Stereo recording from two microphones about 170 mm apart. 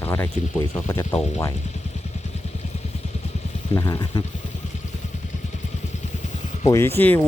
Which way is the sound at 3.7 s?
20° left (ahead or behind).